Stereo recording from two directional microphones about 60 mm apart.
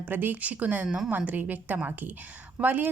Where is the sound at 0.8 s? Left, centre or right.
Centre.